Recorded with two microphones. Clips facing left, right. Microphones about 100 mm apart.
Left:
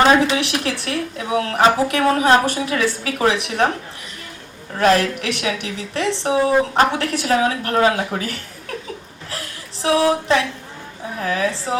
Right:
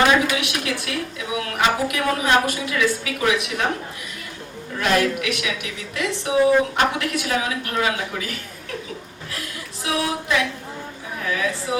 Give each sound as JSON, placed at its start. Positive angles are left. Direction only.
{"t": 0.0, "sound": "a woman's voice", "side_deg": 30}
{"t": 4.8, "sound": "a woman's voice", "side_deg": 40}
{"t": 9.8, "sound": "a woman's voice", "side_deg": 35}